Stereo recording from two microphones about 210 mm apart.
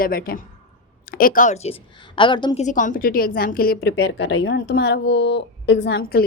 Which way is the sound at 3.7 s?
55° left (ahead or behind).